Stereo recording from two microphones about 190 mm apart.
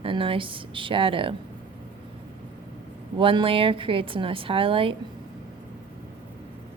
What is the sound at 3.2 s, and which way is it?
A woman's voice, 25° right (ahead or behind).